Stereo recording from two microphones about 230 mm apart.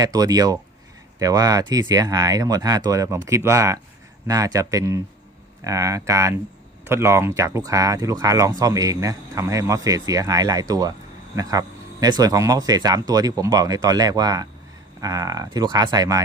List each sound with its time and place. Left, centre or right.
0.0 s speech: centre